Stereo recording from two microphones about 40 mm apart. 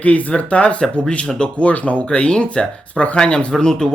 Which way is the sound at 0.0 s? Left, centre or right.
Left.